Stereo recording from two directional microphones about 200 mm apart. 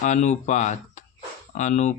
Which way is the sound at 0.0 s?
35° left (ahead or behind).